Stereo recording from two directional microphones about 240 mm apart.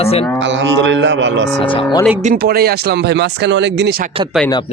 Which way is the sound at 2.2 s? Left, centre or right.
Right.